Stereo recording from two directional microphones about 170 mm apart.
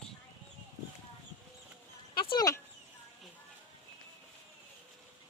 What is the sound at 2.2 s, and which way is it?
Speech, 25° left (ahead or behind).